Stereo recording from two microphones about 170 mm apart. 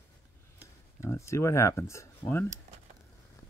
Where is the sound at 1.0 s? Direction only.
15° left (ahead or behind).